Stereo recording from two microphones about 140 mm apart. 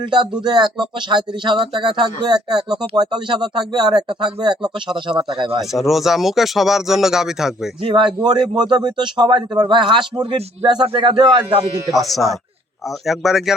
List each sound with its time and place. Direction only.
0.0 s speech: 35° right (ahead or behind)
5.5 s speech: centre (ahead or behind)
7.8 s speech: 35° right (ahead or behind)
11.9 s speech: centre (ahead or behind)